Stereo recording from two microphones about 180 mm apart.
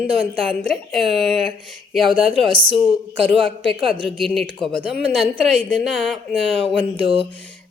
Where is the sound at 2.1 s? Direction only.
30° right (ahead or behind).